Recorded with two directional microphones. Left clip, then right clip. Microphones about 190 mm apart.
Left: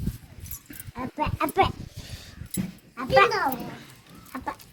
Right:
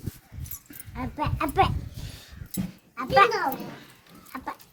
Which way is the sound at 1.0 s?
35° left (ahead or behind).